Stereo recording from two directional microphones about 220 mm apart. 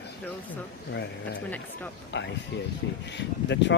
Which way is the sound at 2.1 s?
55° left (ahead or behind).